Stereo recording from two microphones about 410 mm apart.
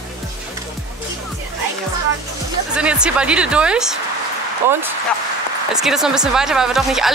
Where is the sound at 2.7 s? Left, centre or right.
Centre.